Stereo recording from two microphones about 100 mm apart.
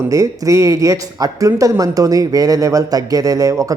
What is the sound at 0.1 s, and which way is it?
Speech, 35° right (ahead or behind).